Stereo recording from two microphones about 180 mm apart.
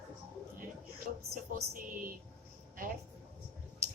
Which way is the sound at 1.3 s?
50° right (ahead or behind).